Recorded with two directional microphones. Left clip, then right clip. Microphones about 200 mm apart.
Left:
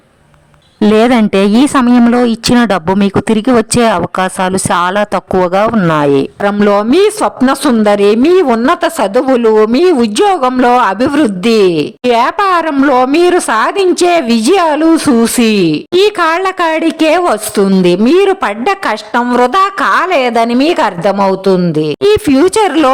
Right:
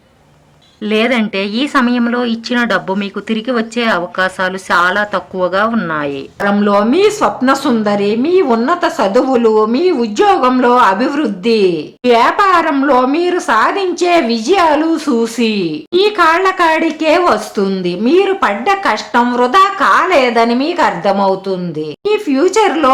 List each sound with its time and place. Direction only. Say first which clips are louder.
0.8 s a woman's voice: left 5 dB; 50° left (ahead or behind)